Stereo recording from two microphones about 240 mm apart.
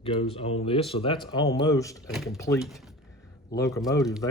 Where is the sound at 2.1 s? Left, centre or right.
Centre.